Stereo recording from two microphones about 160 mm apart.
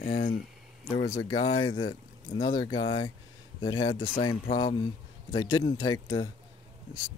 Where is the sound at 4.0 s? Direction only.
60° left (ahead or behind).